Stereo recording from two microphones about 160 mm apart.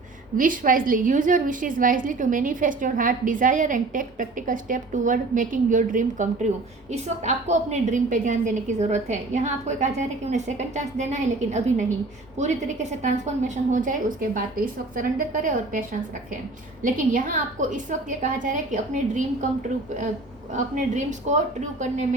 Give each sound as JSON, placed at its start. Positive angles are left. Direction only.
{"t": 0.3, "sound": "a woman's voice", "side_deg": -60}
{"t": 20.5, "sound": "a woman's voice", "side_deg": -50}